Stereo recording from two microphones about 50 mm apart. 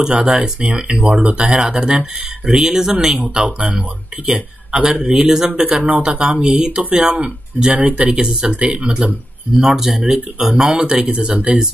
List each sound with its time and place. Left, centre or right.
0.0 s speech: right
1.0 s speech: right
7.7 s speech: right
9.6 s speech: centre